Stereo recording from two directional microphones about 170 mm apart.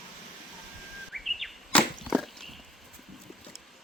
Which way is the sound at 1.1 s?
Centre (ahead or behind).